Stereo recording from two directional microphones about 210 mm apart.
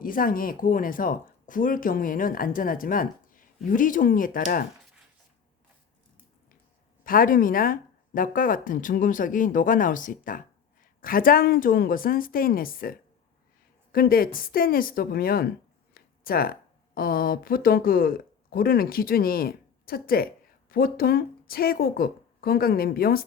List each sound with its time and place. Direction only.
0.0 s speech: 40° left (ahead or behind)
7.0 s a woman's voice: 40° left (ahead or behind)